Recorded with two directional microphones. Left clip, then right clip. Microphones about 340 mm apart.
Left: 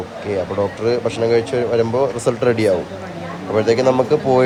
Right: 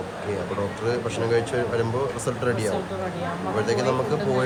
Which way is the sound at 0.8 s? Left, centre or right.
Centre.